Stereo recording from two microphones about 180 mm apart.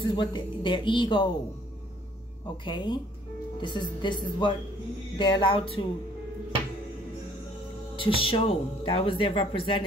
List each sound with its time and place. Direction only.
0.0 s speech: 25° left (ahead or behind)
2.6 s speech: 25° left (ahead or behind)
7.9 s speech: 30° left (ahead or behind)